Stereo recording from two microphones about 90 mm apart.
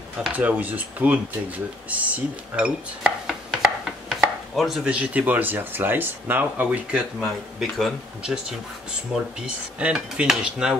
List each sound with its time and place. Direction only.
0.3 s cutlery: 15° right (ahead or behind)
1.9 s chopping: 15° right (ahead or behind)
4.8 s speech: 15° right (ahead or behind)
7.2 s speech: centre (ahead or behind)
8.2 s cutlery: 5° right (ahead or behind)